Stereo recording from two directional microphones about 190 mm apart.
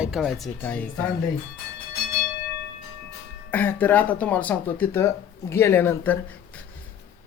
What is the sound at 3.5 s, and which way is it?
Speech, 10° left (ahead or behind).